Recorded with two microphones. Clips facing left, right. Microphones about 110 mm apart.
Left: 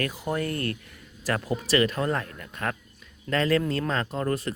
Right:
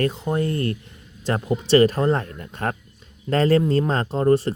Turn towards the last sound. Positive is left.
turn(degrees=-30)  # may be behind; listen again after turning